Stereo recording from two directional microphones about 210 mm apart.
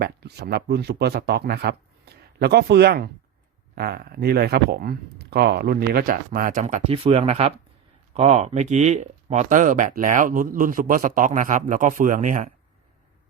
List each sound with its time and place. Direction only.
0.0 s speech: 50° right (ahead or behind)